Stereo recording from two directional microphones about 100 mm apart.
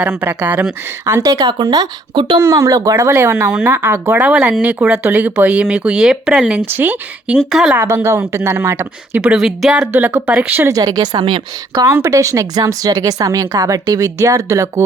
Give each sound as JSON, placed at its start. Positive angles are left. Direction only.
{"t": 0.0, "sound": "speech", "side_deg": -20}
{"t": 1.0, "sound": "a woman's voice", "side_deg": -35}
{"t": 2.4, "sound": "a woman's voice", "side_deg": -35}
{"t": 6.7, "sound": "speech", "side_deg": -20}
{"t": 7.5, "sound": "a woman's voice", "side_deg": -5}
{"t": 7.8, "sound": "speech", "side_deg": -25}
{"t": 9.2, "sound": "speech", "side_deg": -10}
{"t": 10.7, "sound": "speech", "side_deg": -40}
{"t": 11.9, "sound": "speech", "side_deg": -20}
{"t": 12.1, "sound": "a woman's voice", "side_deg": -35}